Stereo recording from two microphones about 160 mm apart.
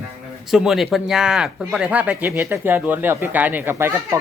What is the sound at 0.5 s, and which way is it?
Speech, centre (ahead or behind).